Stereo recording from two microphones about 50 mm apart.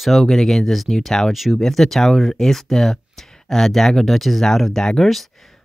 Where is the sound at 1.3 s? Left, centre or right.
Centre.